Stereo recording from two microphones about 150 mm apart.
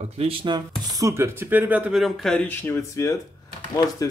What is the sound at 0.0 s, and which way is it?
Speech, 40° right (ahead or behind).